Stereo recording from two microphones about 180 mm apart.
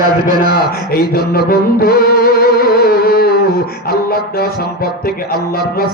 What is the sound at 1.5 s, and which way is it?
Music, 55° left (ahead or behind).